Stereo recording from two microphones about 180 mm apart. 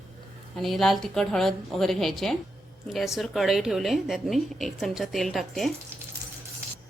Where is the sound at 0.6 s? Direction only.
Centre (ahead or behind).